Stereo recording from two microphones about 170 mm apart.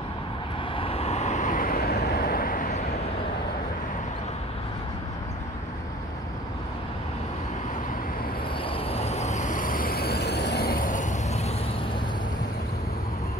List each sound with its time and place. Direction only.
0.7 s vehicle: 35° left (ahead or behind); by 2.8 s 55° left (ahead or behind)
8.6 s vehicle: 35° left (ahead or behind)